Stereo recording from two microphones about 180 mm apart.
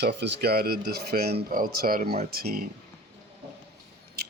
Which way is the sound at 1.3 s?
50° right (ahead or behind).